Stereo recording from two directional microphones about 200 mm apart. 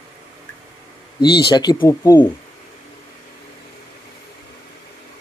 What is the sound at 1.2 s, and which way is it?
Speech, 20° left (ahead or behind).